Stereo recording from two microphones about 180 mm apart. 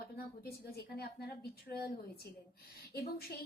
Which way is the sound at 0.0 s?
60° left (ahead or behind).